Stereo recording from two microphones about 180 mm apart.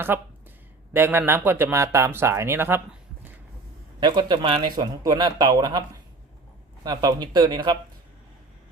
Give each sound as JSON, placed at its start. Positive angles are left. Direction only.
{"t": 0.1, "sound": "speech", "side_deg": -10}
{"t": 4.0, "sound": "speech", "side_deg": -25}
{"t": 6.8, "sound": "speech", "side_deg": -20}